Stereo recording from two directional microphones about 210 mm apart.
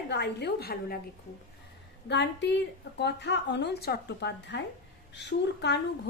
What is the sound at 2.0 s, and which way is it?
A woman's voice, 55° left (ahead or behind).